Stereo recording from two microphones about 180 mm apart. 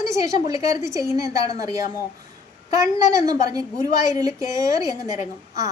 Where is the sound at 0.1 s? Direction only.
20° right (ahead or behind).